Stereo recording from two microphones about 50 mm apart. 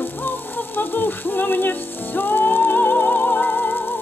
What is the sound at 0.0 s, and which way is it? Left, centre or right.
Music, left.